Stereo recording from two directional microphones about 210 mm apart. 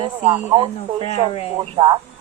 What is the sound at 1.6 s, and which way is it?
Speech, 20° right (ahead or behind).